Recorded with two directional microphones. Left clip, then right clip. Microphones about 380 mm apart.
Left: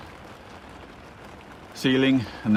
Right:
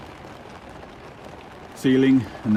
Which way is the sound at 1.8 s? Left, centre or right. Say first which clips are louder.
Right 3 dB; left.